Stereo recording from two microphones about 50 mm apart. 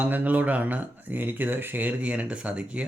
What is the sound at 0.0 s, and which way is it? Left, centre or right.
Speech, right.